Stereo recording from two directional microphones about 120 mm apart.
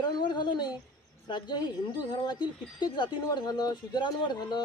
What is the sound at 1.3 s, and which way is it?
Speech, 40° left (ahead or behind).